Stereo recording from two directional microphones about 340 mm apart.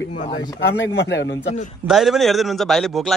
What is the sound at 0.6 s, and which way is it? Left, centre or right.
Speech, left.